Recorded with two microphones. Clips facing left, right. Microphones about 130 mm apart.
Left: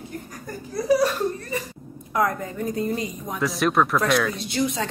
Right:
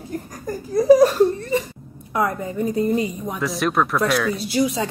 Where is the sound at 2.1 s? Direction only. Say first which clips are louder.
Right 1 dB; 5° right (ahead or behind).